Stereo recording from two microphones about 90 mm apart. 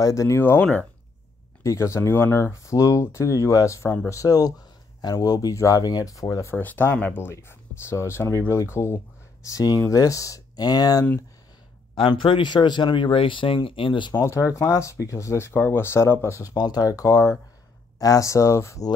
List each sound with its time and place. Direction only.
0.0 s speech: 35° left (ahead or behind)
6.6 s speech: 20° left (ahead or behind)
7.3 s speech: 30° left (ahead or behind)
11.9 s speech: 65° left (ahead or behind)
14.2 s speech: 35° left (ahead or behind)